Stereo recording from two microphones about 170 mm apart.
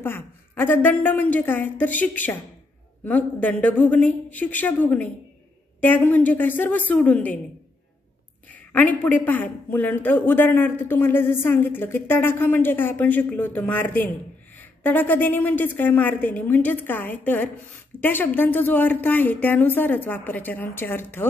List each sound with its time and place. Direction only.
0.0 s a woman's voice: 10° left (ahead or behind)
8.7 s a woman's voice: 10° left (ahead or behind)